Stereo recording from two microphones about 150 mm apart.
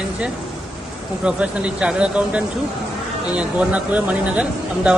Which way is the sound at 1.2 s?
5° right (ahead or behind).